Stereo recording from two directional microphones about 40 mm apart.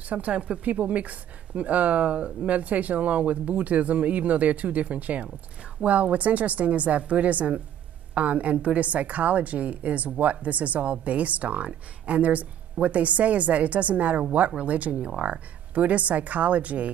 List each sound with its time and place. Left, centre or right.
0.3 s speech: right
0.7 s a woman's voice: right